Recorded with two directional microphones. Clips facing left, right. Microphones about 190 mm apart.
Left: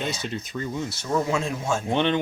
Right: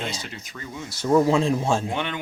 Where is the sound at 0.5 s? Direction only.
15° left (ahead or behind).